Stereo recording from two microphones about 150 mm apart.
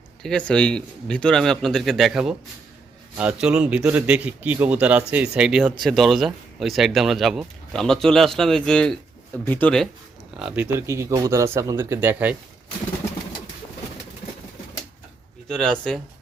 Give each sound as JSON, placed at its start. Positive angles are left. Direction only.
{"t": 0.2, "sound": "a man's voice", "side_deg": 5}
{"t": 10.3, "sound": "a man's voice", "side_deg": -10}
{"t": 15.4, "sound": "speech", "side_deg": 5}